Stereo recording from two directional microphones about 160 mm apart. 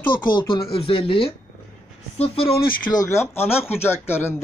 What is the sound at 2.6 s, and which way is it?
Speech, 20° left (ahead or behind).